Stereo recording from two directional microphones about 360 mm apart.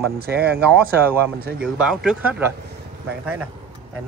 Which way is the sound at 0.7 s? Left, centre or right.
Centre.